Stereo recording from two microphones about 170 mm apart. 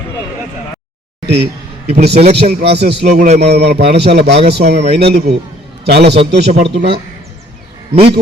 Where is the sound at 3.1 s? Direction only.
40° right (ahead or behind).